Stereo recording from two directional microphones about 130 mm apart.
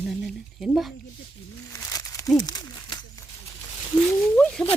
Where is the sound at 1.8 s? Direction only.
25° left (ahead or behind).